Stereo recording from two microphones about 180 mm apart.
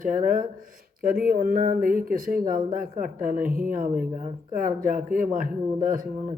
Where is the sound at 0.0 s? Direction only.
50° right (ahead or behind).